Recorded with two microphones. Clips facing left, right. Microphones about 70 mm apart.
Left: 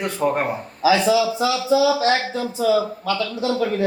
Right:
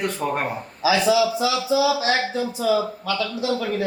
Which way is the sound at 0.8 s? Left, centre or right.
Left.